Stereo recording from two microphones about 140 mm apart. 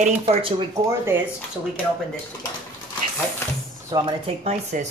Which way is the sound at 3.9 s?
25° right (ahead or behind).